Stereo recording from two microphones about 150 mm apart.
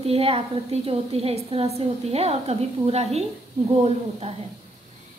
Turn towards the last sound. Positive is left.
turn(degrees=-45)  # may be behind; listen again after turning